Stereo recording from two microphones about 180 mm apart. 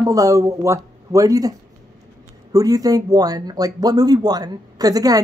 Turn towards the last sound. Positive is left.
turn(degrees=-20)  # may be behind; listen again after turning